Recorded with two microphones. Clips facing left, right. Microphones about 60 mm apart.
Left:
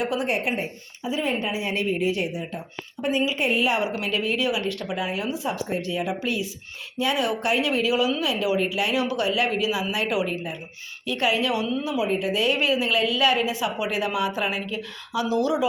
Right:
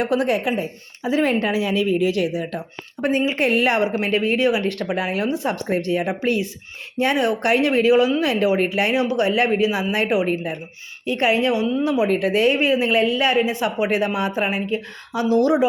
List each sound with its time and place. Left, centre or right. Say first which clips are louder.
0.0 s speech: right 5 dB; right
1.0 s speech: right 6 dB; right
3.0 s speech: right 4 dB; right
3.3 s speech: right 4 dB; right
4.0 s speech: right 6 dB; right
9.0 s a woman's voice: right 5 dB; right
11.8 s speech: right 6 dB; right
12.3 s a woman's voice: right 5 dB; right
13.6 s a woman's voice: right 5 dB; right